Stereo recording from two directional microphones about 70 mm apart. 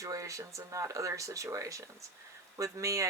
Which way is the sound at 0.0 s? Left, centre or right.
Right.